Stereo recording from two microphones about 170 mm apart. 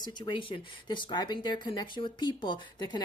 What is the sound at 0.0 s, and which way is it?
Speech, 25° left (ahead or behind).